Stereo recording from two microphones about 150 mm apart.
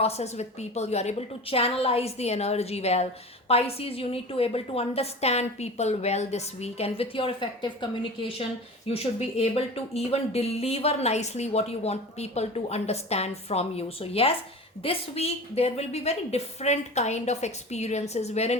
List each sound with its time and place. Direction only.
0.0 s a woman's voice: 45° left (ahead or behind)
8.9 s speech: 45° left (ahead or behind)